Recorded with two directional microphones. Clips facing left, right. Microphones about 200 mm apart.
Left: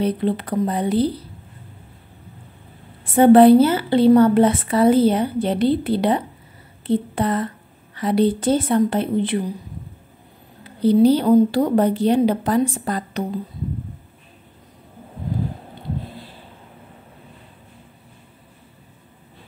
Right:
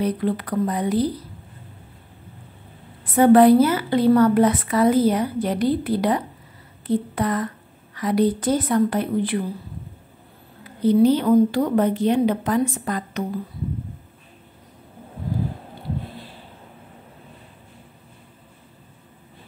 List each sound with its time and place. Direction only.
0.0 s a woman's voice: 25° left (ahead or behind)
3.2 s a woman's voice: 30° left (ahead or behind)
10.6 s a woman's voice: 30° left (ahead or behind)